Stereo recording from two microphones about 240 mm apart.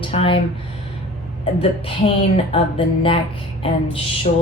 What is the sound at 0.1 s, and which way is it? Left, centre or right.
Speech, left.